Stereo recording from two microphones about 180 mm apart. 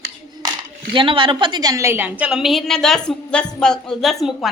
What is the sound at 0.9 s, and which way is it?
A woman's voice, 30° right (ahead or behind).